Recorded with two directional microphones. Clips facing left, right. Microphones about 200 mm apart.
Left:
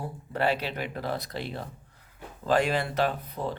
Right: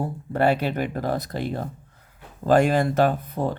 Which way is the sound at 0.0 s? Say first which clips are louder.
Right 6 dB; 50° right (ahead or behind).